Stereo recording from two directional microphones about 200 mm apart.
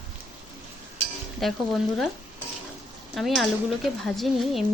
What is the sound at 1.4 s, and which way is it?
Speech, centre (ahead or behind).